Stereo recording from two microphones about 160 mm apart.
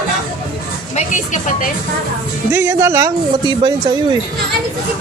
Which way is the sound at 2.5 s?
15° right (ahead or behind).